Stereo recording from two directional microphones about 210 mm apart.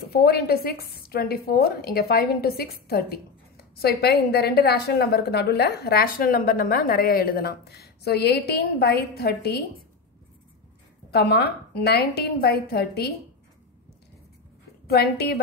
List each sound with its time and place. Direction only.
0.1 s a woman's voice: 45° left (ahead or behind)
11.1 s a woman's voice: 50° left (ahead or behind)
14.9 s a woman's voice: 50° left (ahead or behind)